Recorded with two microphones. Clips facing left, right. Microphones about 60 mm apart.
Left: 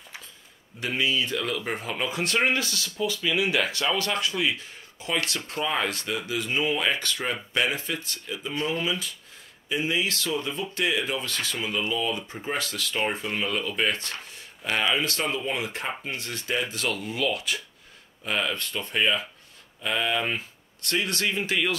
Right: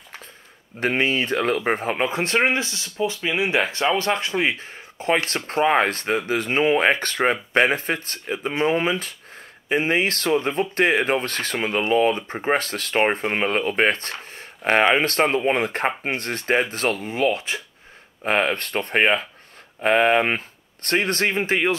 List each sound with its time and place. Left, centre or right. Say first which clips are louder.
0.7 s speech: right 5 dB; right
18.2 s speech: right 7 dB; right